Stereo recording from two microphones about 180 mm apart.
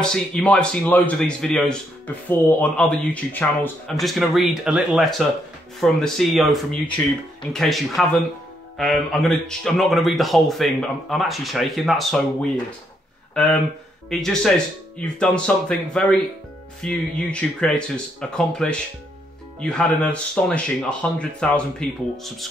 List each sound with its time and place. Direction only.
0.0 s speech: 5° left (ahead or behind)
4.0 s speech: centre (ahead or behind)